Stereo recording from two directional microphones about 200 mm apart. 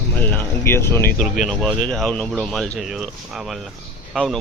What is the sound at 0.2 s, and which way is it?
Speech, 10° left (ahead or behind).